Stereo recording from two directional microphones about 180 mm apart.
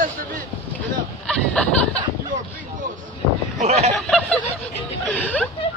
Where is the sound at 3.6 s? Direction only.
35° right (ahead or behind).